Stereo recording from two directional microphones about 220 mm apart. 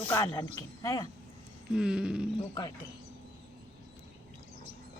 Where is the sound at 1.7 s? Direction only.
5° right (ahead or behind).